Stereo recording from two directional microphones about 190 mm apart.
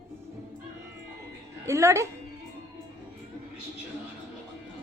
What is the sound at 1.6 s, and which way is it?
Speech, 15° right (ahead or behind).